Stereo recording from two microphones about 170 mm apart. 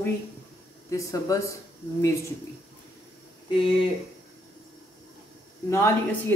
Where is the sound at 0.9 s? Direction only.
20° left (ahead or behind).